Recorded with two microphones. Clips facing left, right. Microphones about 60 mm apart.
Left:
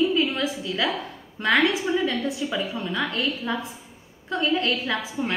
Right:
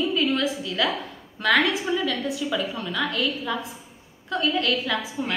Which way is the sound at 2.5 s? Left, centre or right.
Left.